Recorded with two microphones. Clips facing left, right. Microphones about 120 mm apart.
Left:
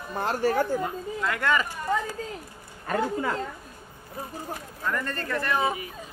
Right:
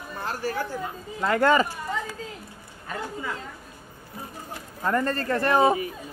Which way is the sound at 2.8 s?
55° left (ahead or behind).